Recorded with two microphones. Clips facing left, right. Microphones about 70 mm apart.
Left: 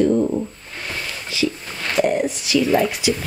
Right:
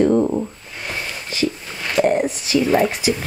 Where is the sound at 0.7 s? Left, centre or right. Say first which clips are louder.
Right 1 dB; centre.